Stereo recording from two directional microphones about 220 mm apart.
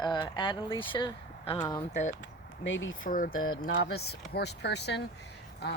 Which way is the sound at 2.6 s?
55° left (ahead or behind).